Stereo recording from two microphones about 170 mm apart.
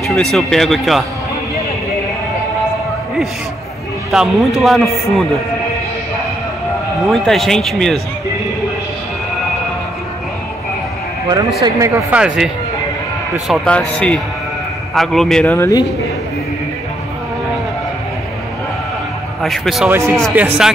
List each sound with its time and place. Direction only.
0.0 s a man's voice: centre (ahead or behind)
4.1 s a man's voice: centre (ahead or behind)
7.1 s a man's voice: centre (ahead or behind)
11.6 s speech: 20° right (ahead or behind)
13.5 s a man's voice: 5° left (ahead or behind)
15.4 s speech: 15° left (ahead or behind)
19.4 s a man's voice: centre (ahead or behind)
19.9 s speech: 15° right (ahead or behind)